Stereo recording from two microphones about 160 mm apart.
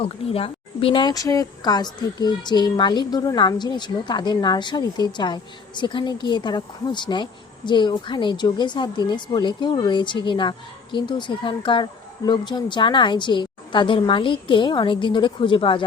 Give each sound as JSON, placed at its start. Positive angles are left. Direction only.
{"t": 0.0, "sound": "speech", "side_deg": 35}